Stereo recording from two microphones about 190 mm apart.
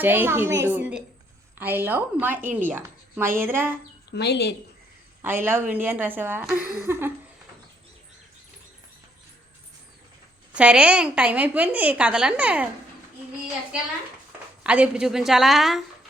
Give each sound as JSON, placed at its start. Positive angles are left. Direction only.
{"t": 0.0, "sound": "a woman's voice", "side_deg": -10}
{"t": 4.1, "sound": "speech", "side_deg": 60}
{"t": 5.2, "sound": "a woman's voice", "side_deg": -10}
{"t": 10.5, "sound": "a woman's voice", "side_deg": -5}
{"t": 14.6, "sound": "a woman's voice", "side_deg": -5}